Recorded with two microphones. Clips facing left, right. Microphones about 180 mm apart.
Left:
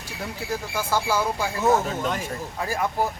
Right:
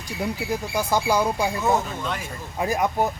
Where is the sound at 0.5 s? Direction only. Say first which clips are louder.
Right 1 dB; 15° right (ahead or behind).